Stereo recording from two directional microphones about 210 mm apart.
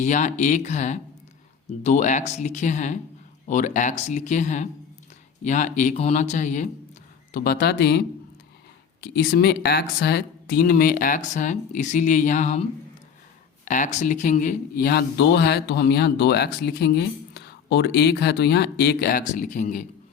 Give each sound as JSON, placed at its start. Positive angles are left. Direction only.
{"t": 0.0, "sound": "speech", "side_deg": 35}
{"t": 13.7, "sound": "speech", "side_deg": 35}